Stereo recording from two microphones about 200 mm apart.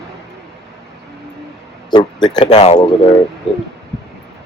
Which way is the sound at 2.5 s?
35° left (ahead or behind).